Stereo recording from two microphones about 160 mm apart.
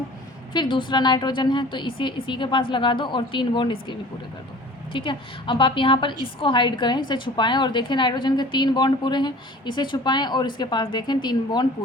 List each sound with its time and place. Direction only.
0.5 s a woman's voice: 30° left (ahead or behind)